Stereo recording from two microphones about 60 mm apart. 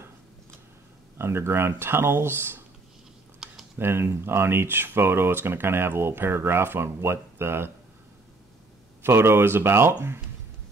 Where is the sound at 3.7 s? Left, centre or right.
Right.